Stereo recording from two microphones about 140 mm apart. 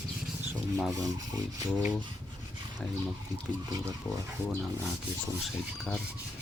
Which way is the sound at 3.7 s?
25° right (ahead or behind).